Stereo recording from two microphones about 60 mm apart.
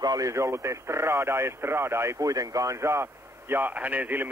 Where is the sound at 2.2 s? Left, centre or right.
Right.